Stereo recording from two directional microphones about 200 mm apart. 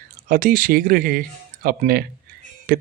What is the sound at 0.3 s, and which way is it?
Speech, 45° right (ahead or behind).